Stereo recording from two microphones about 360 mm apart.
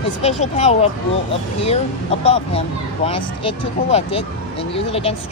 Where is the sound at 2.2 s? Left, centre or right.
Centre.